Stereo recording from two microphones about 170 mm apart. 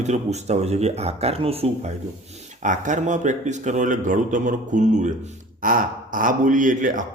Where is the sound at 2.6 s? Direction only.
45° right (ahead or behind).